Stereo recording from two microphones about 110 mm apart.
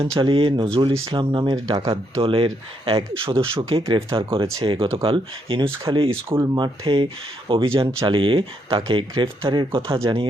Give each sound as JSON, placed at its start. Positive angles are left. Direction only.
{"t": 0.2, "sound": "speech", "side_deg": -50}
{"t": 1.9, "sound": "speech", "side_deg": -55}
{"t": 6.3, "sound": "speech", "side_deg": -35}
{"t": 6.8, "sound": "speech", "side_deg": -55}